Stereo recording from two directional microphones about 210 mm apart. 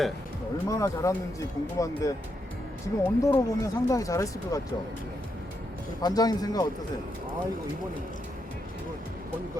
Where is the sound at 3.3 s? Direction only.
15° left (ahead or behind).